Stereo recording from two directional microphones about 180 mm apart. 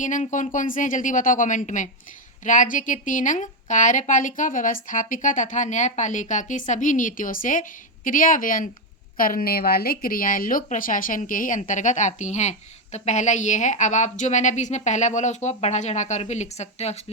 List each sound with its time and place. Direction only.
0.0 s a woman's voice: 45° left (ahead or behind)